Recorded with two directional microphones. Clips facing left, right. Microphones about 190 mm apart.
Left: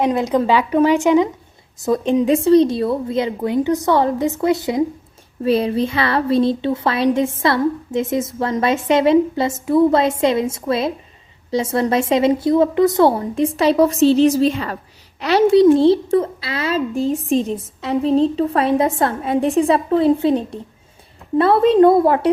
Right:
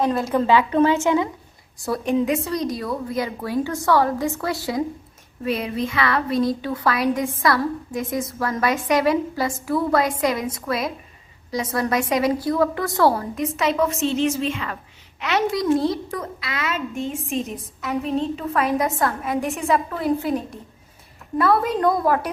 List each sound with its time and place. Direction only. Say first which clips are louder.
0.0 s a woman's voice: left 4 dB; 20° left (ahead or behind)
5.4 s a woman's voice: left 7 dB; 30° left (ahead or behind)